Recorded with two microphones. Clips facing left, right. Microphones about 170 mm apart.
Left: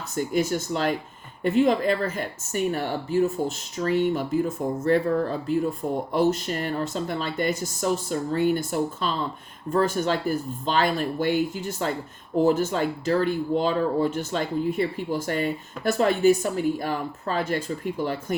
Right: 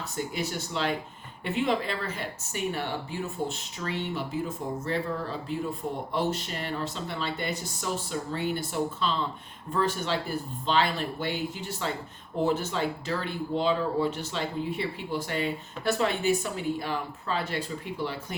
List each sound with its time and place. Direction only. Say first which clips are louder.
0.3 s speech: left 9 dB; 45° left (ahead or behind)
6.1 s speech: left 7 dB; 45° left (ahead or behind)